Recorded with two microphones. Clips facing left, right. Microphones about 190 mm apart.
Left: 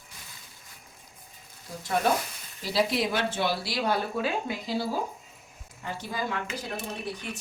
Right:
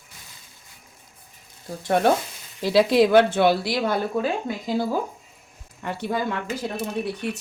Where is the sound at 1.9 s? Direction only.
65° right (ahead or behind).